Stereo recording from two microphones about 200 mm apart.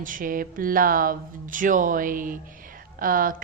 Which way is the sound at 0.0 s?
40° right (ahead or behind).